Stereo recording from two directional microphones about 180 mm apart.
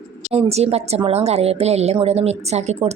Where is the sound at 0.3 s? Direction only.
35° right (ahead or behind).